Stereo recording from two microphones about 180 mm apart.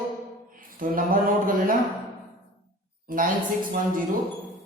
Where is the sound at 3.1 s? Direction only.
50° right (ahead or behind).